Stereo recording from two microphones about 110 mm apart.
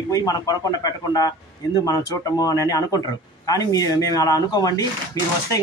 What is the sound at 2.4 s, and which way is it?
A man's voice, 30° left (ahead or behind).